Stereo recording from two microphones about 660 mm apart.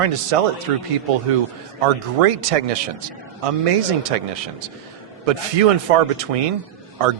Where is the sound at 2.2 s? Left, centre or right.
Right.